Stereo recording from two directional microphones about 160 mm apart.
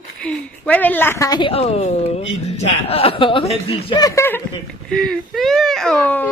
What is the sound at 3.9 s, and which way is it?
Speech, 20° left (ahead or behind).